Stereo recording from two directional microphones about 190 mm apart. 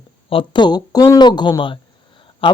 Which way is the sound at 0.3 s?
25° left (ahead or behind).